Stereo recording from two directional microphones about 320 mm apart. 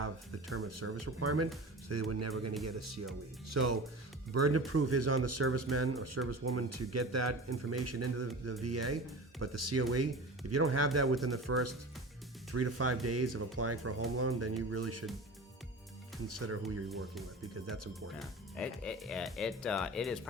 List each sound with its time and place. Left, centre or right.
0.5 s speech: right
16.2 s speech: right
18.2 s speech: centre